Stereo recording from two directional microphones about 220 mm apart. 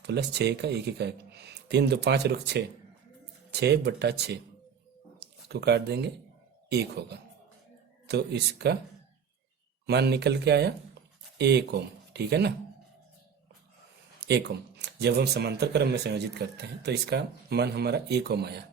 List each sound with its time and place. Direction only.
0.1 s speech: 50° right (ahead or behind)
8.0 s speech: 50° right (ahead or behind)
9.8 s speech: 50° right (ahead or behind)
14.2 s speech: 50° right (ahead or behind)